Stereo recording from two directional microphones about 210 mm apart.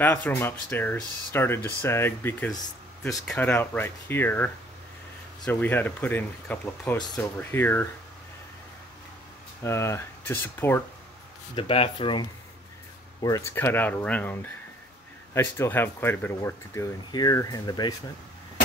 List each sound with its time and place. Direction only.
0.0 s speech: 10° left (ahead or behind)
9.6 s speech: 15° left (ahead or behind)
11.5 s speech: 25° left (ahead or behind)